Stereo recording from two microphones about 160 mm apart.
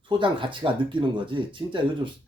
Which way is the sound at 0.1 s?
30° right (ahead or behind).